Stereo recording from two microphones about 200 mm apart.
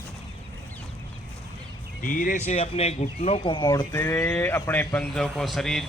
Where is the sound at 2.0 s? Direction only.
45° left (ahead or behind).